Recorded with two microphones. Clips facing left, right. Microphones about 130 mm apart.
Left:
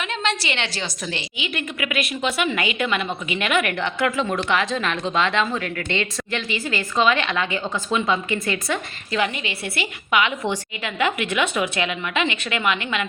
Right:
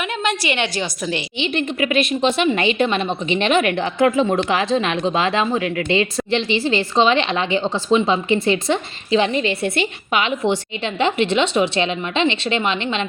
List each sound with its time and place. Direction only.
0.2 s a woman's voice: 15° right (ahead or behind)
1.4 s a woman's voice: 30° right (ahead or behind)